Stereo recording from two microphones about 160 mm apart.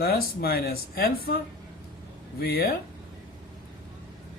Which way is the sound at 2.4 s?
70° left (ahead or behind).